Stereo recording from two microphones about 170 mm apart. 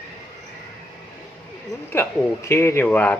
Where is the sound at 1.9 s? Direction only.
15° left (ahead or behind).